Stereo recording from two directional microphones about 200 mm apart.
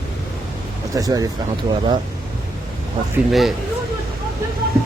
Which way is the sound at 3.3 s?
Centre (ahead or behind).